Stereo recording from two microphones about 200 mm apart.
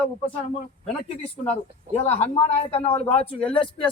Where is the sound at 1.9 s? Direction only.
30° left (ahead or behind).